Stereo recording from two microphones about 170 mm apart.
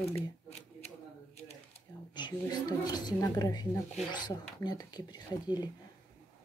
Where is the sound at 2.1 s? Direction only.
25° left (ahead or behind).